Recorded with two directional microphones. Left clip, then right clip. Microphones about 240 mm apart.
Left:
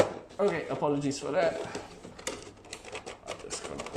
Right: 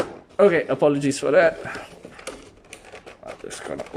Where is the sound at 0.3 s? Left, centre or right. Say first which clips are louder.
Right 12 dB; right.